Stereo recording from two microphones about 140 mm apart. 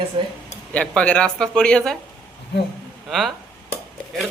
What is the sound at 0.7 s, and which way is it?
Speech, 10° left (ahead or behind).